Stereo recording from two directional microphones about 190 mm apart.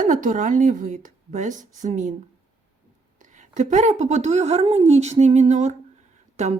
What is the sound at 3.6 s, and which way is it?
A woman's voice, 40° right (ahead or behind).